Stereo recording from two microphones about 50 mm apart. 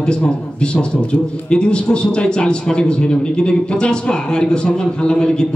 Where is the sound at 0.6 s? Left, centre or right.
Centre.